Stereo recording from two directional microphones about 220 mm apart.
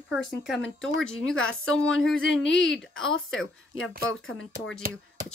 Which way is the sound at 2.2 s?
55° left (ahead or behind).